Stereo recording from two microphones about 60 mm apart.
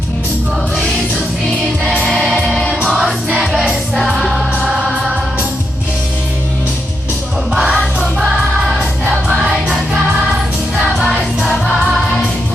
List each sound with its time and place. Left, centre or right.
2.0 s music: centre
7.7 s music: centre
10.9 s music: centre